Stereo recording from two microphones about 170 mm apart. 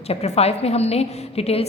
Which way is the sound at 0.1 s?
35° left (ahead or behind).